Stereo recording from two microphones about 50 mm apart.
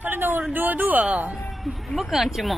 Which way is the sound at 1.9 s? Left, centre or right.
Centre.